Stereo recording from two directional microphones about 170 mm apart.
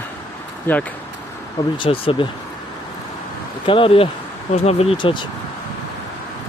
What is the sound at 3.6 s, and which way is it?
Speech, 30° left (ahead or behind).